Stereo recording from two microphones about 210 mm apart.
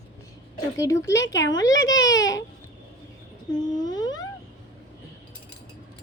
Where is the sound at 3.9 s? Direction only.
20° left (ahead or behind).